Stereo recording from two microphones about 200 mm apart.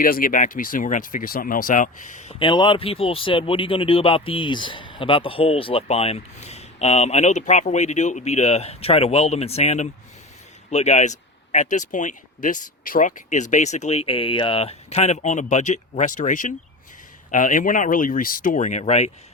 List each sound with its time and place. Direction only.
0.0 s speech: 45° left (ahead or behind)
2.4 s speech: 25° left (ahead or behind)